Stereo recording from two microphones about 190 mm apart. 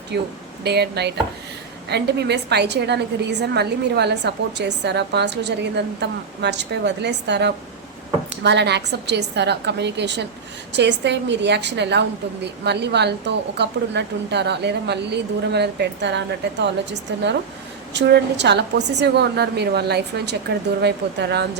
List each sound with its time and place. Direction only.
0.1 s a woman's voice: 60° right (ahead or behind)